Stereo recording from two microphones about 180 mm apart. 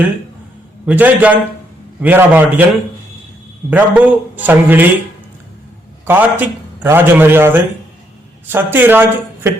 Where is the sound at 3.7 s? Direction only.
10° right (ahead or behind).